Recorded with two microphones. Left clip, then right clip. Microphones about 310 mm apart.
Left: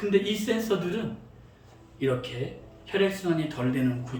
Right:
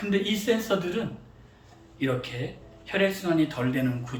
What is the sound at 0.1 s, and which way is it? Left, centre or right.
Speech, centre.